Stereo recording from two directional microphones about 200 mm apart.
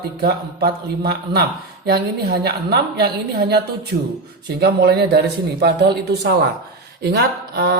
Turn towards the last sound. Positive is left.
turn(degrees=-50)  # may be behind; listen again after turning